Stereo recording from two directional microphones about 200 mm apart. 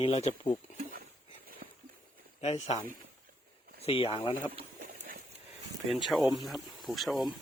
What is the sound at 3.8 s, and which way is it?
Speech, 30° left (ahead or behind).